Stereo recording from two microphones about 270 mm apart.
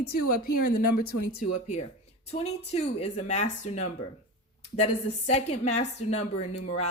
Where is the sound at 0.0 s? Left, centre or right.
Left.